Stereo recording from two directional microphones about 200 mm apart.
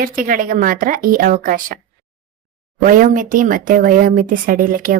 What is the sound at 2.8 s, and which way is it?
A woman's voice, 40° right (ahead or behind).